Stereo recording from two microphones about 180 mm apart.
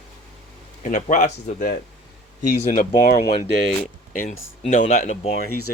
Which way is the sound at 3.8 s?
45° left (ahead or behind).